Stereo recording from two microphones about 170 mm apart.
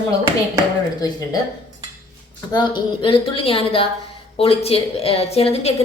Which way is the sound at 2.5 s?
25° left (ahead or behind).